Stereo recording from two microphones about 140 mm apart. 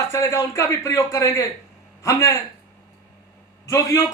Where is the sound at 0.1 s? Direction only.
20° left (ahead or behind).